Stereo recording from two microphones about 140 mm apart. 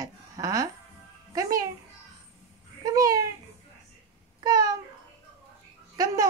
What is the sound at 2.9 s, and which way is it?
Speech, 25° right (ahead or behind).